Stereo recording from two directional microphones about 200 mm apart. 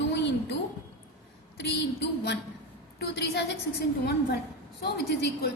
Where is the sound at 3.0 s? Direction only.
60° left (ahead or behind).